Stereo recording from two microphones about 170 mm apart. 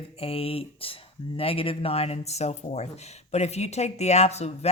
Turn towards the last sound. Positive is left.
turn(degrees=40)  # may be behind; listen again after turning